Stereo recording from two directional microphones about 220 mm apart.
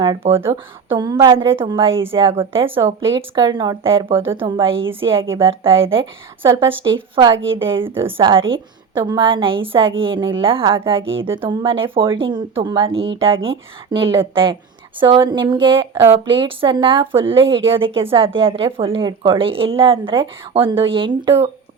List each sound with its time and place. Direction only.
0.0 s a woman's voice: 20° right (ahead or behind)
7.3 s a woman's voice: 60° right (ahead or behind)
7.6 s a woman's voice: 25° right (ahead or behind)
11.0 s a woman's voice: 60° right (ahead or behind)
11.3 s a woman's voice: 20° right (ahead or behind)